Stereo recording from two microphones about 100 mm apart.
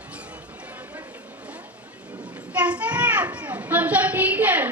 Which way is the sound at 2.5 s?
15° right (ahead or behind).